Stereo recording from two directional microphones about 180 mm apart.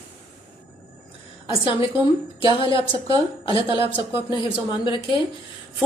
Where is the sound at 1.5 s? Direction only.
30° left (ahead or behind).